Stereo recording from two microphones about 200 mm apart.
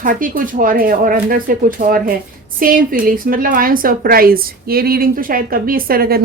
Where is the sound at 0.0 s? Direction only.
45° right (ahead or behind).